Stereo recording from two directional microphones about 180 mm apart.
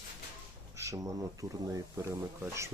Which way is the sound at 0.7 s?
15° right (ahead or behind).